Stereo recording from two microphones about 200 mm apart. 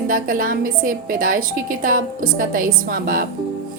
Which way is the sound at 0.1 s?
45° right (ahead or behind).